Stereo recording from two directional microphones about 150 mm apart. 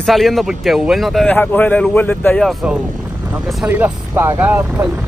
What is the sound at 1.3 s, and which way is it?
Speech, 10° left (ahead or behind).